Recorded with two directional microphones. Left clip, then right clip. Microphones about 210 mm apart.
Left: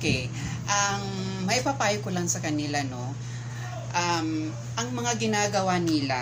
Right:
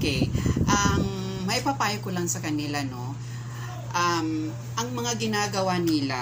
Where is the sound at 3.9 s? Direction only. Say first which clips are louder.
Right 2 dB; 5° left (ahead or behind).